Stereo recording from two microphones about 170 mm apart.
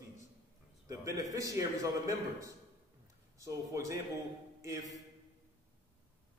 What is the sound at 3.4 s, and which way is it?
Speech, 20° right (ahead or behind).